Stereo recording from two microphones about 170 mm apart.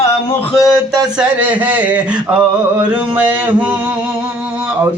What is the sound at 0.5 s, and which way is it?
Speech, 20° left (ahead or behind).